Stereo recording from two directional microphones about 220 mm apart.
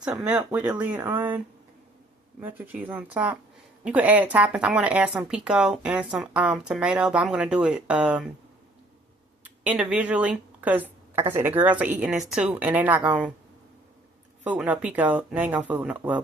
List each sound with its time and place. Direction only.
0.0 s a woman's voice: 5° right (ahead or behind)
2.4 s a woman's voice: 10° right (ahead or behind)
9.4 s a woman's voice: 5° right (ahead or behind)
14.4 s a woman's voice: 5° right (ahead or behind)